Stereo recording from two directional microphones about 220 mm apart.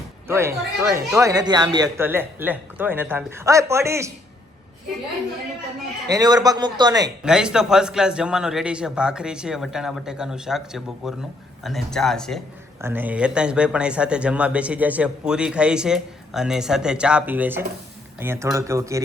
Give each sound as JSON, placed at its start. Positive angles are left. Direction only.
{"t": 0.3, "sound": "speech", "side_deg": -10}
{"t": 6.1, "sound": "speech", "side_deg": -15}
{"t": 7.3, "sound": "speech", "side_deg": -5}
{"t": 12.8, "sound": "speech", "side_deg": -10}